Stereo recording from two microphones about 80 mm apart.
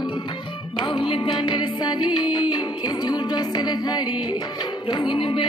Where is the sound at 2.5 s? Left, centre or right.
Left.